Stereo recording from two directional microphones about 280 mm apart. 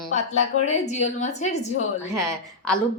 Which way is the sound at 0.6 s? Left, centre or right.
Left.